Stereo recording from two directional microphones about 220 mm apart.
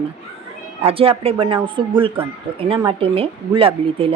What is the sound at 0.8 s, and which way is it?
A man's voice, 25° right (ahead or behind).